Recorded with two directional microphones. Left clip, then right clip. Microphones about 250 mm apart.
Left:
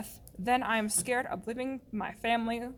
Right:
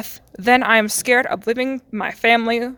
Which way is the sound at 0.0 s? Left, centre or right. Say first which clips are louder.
Right 15 dB; right.